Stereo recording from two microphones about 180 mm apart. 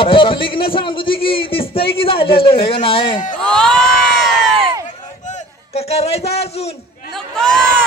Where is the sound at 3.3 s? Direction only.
5° left (ahead or behind).